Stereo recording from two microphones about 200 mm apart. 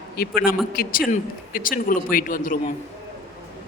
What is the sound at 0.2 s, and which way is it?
A man's voice, 50° left (ahead or behind).